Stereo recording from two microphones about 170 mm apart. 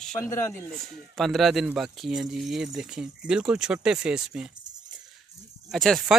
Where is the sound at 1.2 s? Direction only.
Centre (ahead or behind).